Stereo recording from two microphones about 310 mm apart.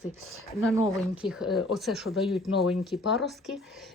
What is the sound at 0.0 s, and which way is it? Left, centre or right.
Speech, centre.